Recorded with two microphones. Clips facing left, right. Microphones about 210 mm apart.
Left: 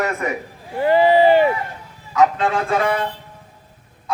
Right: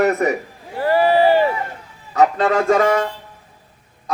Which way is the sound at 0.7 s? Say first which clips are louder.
Left 1 dB; 20° left (ahead or behind).